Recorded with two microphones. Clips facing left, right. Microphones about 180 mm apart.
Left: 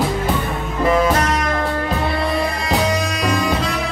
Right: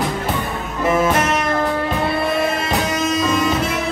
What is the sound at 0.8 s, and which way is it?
Music, 25° right (ahead or behind).